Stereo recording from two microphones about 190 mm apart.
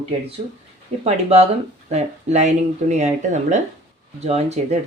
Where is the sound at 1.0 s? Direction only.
35° right (ahead or behind).